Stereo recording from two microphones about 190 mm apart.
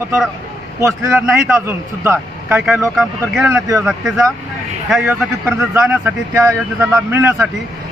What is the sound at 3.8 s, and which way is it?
A man's voice, centre (ahead or behind).